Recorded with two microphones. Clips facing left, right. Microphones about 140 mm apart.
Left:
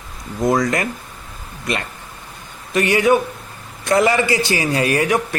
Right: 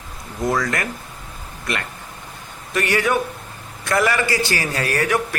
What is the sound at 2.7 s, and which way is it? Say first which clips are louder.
A man's voice: left 5 dB; 20° left (ahead or behind).